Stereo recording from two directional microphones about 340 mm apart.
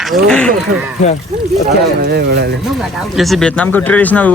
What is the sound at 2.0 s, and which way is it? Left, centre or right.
Speech, right.